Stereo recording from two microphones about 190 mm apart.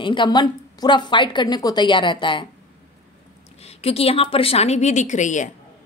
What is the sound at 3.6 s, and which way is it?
A woman's voice, 30° left (ahead or behind).